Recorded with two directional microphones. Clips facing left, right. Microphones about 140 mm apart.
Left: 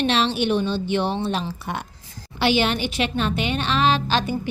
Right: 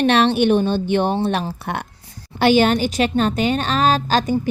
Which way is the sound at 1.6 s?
60° right (ahead or behind).